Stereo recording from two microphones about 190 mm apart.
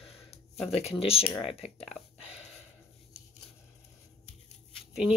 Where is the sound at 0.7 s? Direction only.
30° left (ahead or behind).